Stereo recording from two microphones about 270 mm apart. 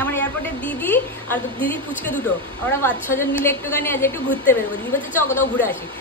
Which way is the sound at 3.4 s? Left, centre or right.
Centre.